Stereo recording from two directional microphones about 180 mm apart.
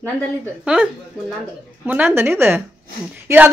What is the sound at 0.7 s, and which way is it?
Speech, 5° right (ahead or behind).